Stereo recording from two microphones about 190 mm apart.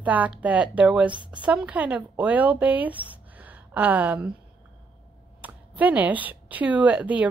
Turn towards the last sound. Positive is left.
turn(degrees=-5)  # may be behind; listen again after turning